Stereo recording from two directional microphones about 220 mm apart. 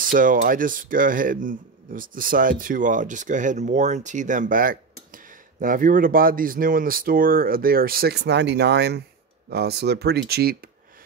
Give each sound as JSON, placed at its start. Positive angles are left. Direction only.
{"t": 0.0, "sound": "speech", "side_deg": -40}